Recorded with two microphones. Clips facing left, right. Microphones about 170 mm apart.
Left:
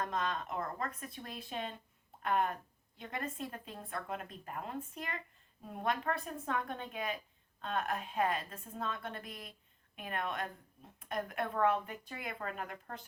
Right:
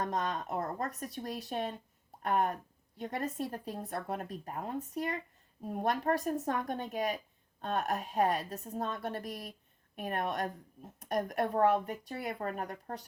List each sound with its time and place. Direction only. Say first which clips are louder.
0.1 s a woman's voice: right 3 dB; 40° right (ahead or behind)